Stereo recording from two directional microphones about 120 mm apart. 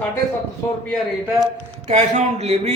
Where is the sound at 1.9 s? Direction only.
75° right (ahead or behind).